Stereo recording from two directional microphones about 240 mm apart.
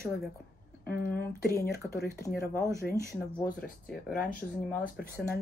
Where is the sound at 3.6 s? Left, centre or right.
Left.